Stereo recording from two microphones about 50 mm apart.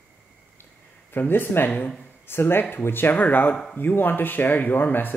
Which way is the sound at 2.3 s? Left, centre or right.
Left.